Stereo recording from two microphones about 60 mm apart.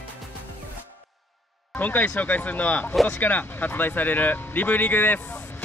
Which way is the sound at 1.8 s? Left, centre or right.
Left.